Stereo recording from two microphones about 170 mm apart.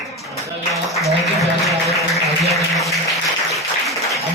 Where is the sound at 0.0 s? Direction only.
Centre (ahead or behind).